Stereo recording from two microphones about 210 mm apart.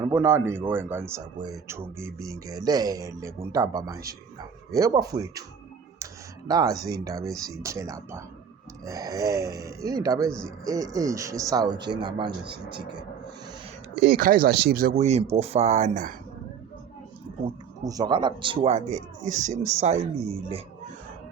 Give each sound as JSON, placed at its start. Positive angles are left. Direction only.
{"t": 0.0, "sound": "speech", "side_deg": -10}
{"t": 6.5, "sound": "speech", "side_deg": -15}
{"t": 13.9, "sound": "speech", "side_deg": -50}
{"t": 17.4, "sound": "a man's voice", "side_deg": -20}